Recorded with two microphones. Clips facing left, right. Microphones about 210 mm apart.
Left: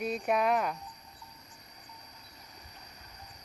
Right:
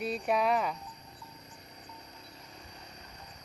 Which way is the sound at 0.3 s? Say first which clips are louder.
Even; centre (ahead or behind).